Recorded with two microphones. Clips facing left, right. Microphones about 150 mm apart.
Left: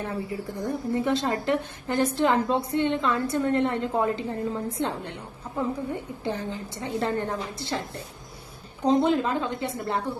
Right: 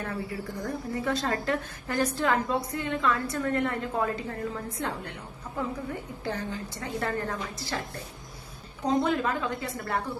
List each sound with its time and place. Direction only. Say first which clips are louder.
0.0 s a woman's voice: left 3 dB; 20° left (ahead or behind)
8.9 s a woman's voice: left 4 dB; 25° left (ahead or behind)